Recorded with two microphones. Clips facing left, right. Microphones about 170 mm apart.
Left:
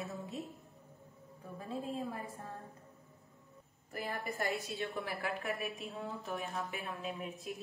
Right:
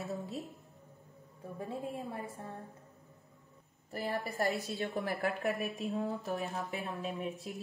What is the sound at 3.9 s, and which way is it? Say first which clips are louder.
A woman's voice: right 3 dB; 35° right (ahead or behind).